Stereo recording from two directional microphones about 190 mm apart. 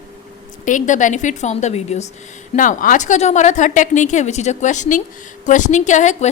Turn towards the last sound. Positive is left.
turn(degrees=40)  # may be behind; listen again after turning